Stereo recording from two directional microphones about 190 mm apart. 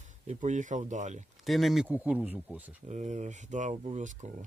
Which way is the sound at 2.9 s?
40° right (ahead or behind).